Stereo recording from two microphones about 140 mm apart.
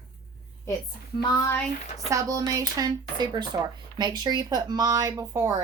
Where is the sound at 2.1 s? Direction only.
25° right (ahead or behind).